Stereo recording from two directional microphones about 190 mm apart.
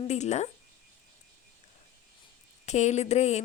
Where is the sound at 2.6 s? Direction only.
35° left (ahead or behind).